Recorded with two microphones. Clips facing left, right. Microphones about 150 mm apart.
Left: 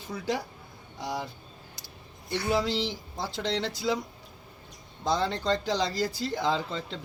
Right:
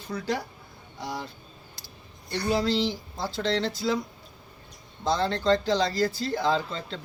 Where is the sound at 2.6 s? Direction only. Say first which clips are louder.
Right 4 dB; 20° left (ahead or behind).